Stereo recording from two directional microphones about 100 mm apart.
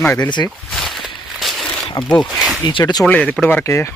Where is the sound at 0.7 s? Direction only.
Centre (ahead or behind).